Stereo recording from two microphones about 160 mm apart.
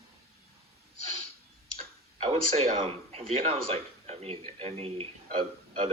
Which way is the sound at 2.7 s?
35° right (ahead or behind).